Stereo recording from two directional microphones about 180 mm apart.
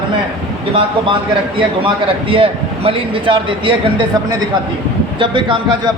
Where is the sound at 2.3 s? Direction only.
30° right (ahead or behind).